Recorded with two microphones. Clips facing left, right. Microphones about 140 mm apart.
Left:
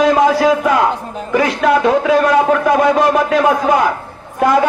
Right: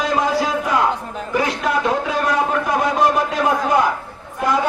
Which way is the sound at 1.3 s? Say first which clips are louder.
Left 7 dB; 90° left.